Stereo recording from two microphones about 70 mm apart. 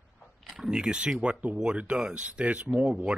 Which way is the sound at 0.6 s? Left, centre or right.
Centre.